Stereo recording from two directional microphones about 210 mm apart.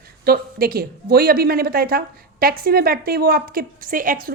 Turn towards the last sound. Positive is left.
turn(degrees=-40)  # may be behind; listen again after turning